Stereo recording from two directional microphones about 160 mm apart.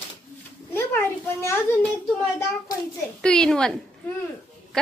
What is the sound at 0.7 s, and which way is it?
A child's voice, 15° left (ahead or behind).